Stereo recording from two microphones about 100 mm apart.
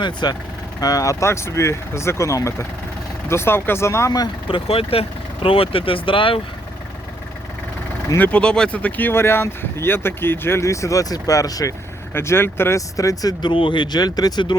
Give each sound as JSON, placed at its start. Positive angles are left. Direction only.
{"t": 0.0, "sound": "speech", "side_deg": 45}
{"t": 0.8, "sound": "speech", "side_deg": 35}
{"t": 4.4, "sound": "speech", "side_deg": 65}
{"t": 8.2, "sound": "speech", "side_deg": 10}
{"t": 12.1, "sound": "speech", "side_deg": 25}
{"t": 13.4, "sound": "speech", "side_deg": 55}